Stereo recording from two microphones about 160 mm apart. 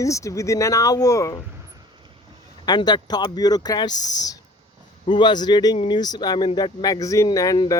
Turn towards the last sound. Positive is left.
turn(degrees=20)  # may be behind; listen again after turning